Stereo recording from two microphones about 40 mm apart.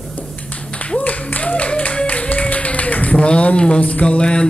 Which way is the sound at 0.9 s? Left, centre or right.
Left.